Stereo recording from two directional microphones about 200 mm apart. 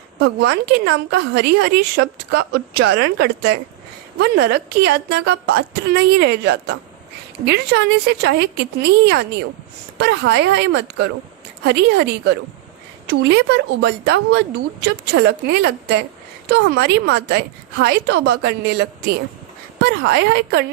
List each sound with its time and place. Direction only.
0.2 s a woman's voice: 55° right (ahead or behind)